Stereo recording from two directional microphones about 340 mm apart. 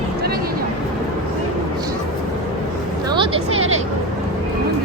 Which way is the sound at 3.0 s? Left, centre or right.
Centre.